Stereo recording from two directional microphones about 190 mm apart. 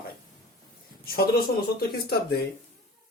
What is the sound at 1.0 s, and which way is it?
Speech, 55° left (ahead or behind).